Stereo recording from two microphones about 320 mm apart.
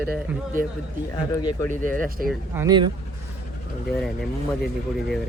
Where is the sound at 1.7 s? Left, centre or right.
Right.